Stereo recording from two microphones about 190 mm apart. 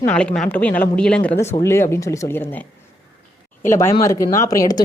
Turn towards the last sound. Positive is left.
turn(degrees=20)  # may be behind; listen again after turning